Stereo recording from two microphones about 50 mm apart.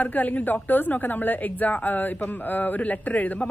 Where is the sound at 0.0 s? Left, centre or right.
Left.